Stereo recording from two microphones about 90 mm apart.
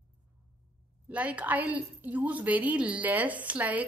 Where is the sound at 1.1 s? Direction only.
15° right (ahead or behind).